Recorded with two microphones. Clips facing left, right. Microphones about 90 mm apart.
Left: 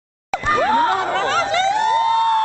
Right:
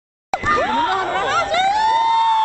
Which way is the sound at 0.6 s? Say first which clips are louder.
Left 4 dB; 15° left (ahead or behind).